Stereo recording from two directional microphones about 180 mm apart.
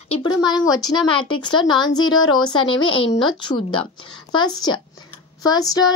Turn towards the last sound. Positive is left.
turn(degrees=20)  # may be behind; listen again after turning